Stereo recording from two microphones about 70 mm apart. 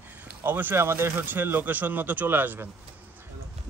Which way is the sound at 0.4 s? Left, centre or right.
Right.